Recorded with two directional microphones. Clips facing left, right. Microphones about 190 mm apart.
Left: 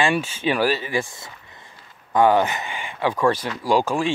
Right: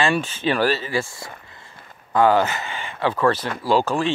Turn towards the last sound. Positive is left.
turn(degrees=10)  # may be behind; listen again after turning